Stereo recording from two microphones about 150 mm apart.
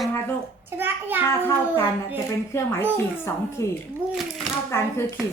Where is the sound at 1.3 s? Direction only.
15° left (ahead or behind).